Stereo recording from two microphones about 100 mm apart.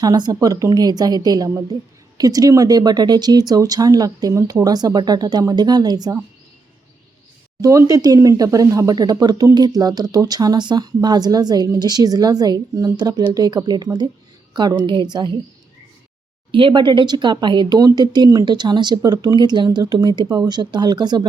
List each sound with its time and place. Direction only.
0.0 s speech: 40° right (ahead or behind)
7.6 s a woman's voice: 35° right (ahead or behind); by 15.4 s 50° right (ahead or behind)
16.5 s speech: 60° right (ahead or behind)